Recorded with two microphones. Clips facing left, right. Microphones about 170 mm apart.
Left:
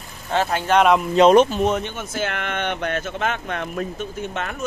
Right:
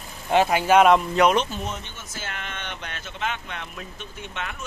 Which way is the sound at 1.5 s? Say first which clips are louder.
Left 11 dB; 65° left (ahead or behind).